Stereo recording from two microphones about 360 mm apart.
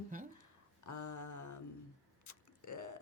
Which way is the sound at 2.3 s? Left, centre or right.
Left.